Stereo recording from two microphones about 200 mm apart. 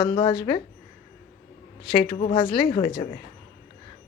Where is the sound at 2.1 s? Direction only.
25° left (ahead or behind).